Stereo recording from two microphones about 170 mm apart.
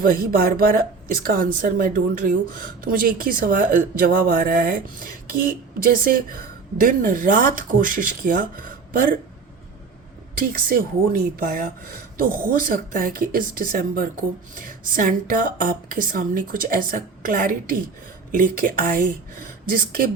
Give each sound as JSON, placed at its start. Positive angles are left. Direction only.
{"t": 0.0, "sound": "speech", "side_deg": -55}
{"t": 10.7, "sound": "speech", "side_deg": -55}